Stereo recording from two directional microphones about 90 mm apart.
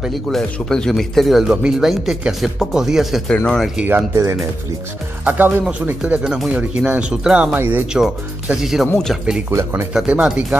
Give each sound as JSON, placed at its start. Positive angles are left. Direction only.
{"t": 0.0, "sound": "speech", "side_deg": 5}
{"t": 3.3, "sound": "speech", "side_deg": 10}
{"t": 3.8, "sound": "speech", "side_deg": -25}
{"t": 5.2, "sound": "speech", "side_deg": -20}
{"t": 7.5, "sound": "speech", "side_deg": -25}
{"t": 7.8, "sound": "speech", "side_deg": -10}
{"t": 9.5, "sound": "speech", "side_deg": -30}
{"t": 9.9, "sound": "speech", "side_deg": -10}